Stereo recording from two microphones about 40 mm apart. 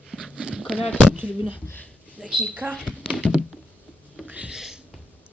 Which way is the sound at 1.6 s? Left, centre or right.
Left.